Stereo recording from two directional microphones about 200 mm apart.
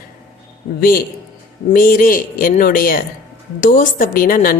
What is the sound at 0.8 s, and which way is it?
Speech, 45° left (ahead or behind).